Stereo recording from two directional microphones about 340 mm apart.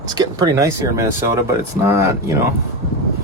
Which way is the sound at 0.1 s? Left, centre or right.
Centre.